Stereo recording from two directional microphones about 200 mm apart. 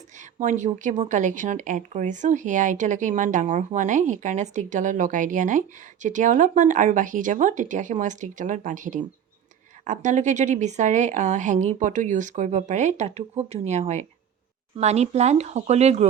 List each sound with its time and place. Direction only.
0.3 s speech: 40° right (ahead or behind)